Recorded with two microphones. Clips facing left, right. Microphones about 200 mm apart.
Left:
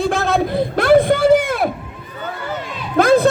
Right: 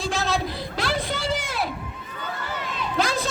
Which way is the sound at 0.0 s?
55° left (ahead or behind).